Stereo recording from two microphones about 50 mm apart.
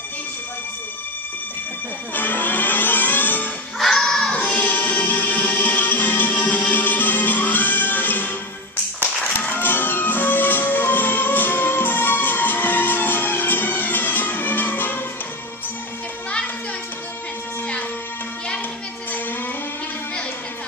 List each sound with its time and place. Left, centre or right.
2.1 s music: left
3.9 s music: centre
4.4 s music: left